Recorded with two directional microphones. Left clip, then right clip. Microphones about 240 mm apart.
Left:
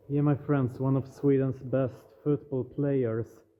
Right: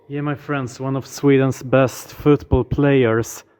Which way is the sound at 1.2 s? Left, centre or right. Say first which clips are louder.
Right 11 dB; right.